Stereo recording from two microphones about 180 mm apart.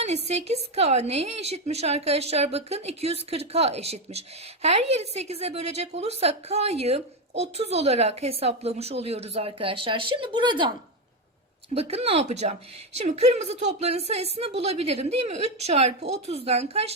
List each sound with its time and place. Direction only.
0.0 s a woman's voice: 40° right (ahead or behind)
11.7 s a woman's voice: 35° right (ahead or behind)